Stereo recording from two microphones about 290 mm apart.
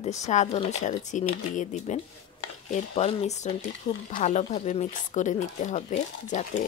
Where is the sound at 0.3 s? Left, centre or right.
Left.